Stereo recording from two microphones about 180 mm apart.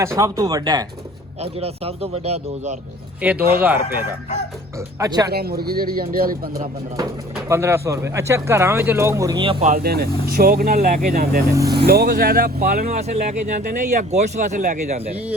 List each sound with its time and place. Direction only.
0.2 s speech: 20° right (ahead or behind)
1.4 s speech: 35° right (ahead or behind)
3.2 s speech: 10° right (ahead or behind)
4.9 s speech: 20° right (ahead or behind)
5.3 s speech: 60° right (ahead or behind)
7.4 s speech: 15° right (ahead or behind)
9.4 s speech: 30° right (ahead or behind)
9.6 s speech: 55° right (ahead or behind)
11.5 s speech: 20° right (ahead or behind)
11.9 s speech: 60° right (ahead or behind)
12.8 s speech: 40° right (ahead or behind)